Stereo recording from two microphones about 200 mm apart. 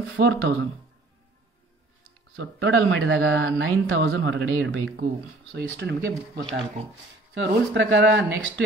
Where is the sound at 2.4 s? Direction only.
75° right (ahead or behind).